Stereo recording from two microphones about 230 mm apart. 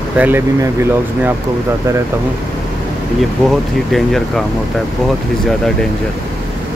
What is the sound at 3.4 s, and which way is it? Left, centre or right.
Speech, centre.